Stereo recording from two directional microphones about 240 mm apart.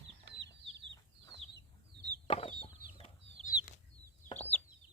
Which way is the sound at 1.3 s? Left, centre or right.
Centre.